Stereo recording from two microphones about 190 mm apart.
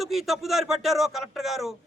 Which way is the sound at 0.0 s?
Centre (ahead or behind).